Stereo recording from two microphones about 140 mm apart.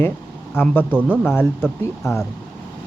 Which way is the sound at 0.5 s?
15° left (ahead or behind).